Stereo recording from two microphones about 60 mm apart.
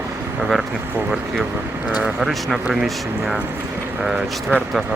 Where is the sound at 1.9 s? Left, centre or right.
Centre.